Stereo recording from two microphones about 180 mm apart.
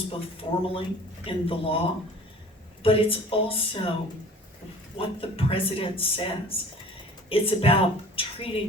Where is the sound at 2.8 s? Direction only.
30° left (ahead or behind).